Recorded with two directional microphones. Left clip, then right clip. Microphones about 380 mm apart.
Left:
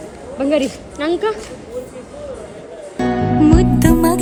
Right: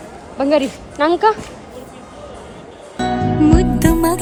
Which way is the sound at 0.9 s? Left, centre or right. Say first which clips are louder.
Right 4 dB; centre.